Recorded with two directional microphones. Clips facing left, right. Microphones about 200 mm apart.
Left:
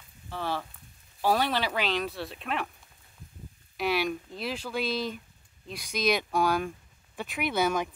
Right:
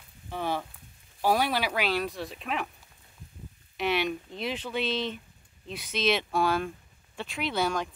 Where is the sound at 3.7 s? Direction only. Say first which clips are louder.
Even; 10° left (ahead or behind).